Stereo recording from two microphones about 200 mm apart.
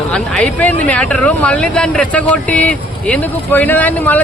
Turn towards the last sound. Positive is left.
turn(degrees=10)  # may be behind; listen again after turning